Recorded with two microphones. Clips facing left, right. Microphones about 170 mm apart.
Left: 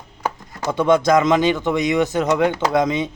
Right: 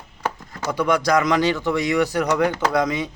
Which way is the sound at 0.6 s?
25° left (ahead or behind).